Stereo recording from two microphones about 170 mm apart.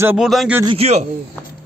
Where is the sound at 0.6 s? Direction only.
35° right (ahead or behind).